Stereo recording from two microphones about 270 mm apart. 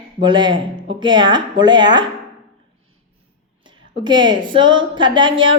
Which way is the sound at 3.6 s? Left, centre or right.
Centre.